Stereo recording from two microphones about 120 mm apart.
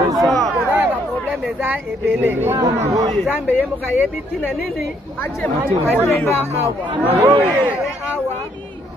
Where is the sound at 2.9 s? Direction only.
30° right (ahead or behind).